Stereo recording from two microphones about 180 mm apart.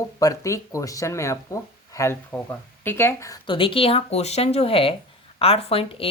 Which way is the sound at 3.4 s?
30° left (ahead or behind).